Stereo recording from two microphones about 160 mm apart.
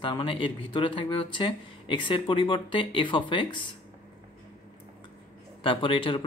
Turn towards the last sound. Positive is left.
turn(degrees=30)  # may be behind; listen again after turning